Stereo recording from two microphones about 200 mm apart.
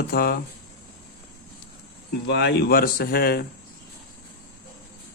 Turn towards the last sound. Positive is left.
turn(degrees=50)  # may be behind; listen again after turning